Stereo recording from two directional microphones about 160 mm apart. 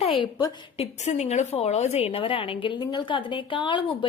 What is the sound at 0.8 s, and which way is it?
A woman's voice, 45° left (ahead or behind).